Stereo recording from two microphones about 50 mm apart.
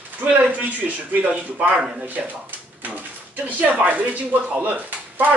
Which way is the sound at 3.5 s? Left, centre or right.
Right.